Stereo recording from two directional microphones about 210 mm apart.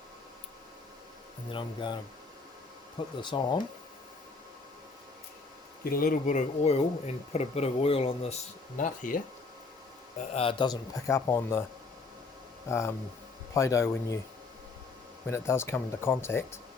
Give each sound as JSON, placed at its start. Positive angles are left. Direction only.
{"t": 1.5, "sound": "speech", "side_deg": 25}
{"t": 3.2, "sound": "speech", "side_deg": 20}
{"t": 5.8, "sound": "speech", "side_deg": 45}
{"t": 8.8, "sound": "speech", "side_deg": 40}
{"t": 10.2, "sound": "speech", "side_deg": 25}
{"t": 12.6, "sound": "speech", "side_deg": 15}
{"t": 15.3, "sound": "speech", "side_deg": 10}